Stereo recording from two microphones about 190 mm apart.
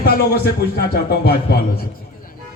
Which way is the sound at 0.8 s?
55° left (ahead or behind).